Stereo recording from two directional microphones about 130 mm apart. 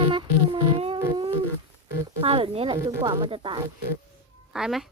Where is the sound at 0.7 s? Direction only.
45° right (ahead or behind).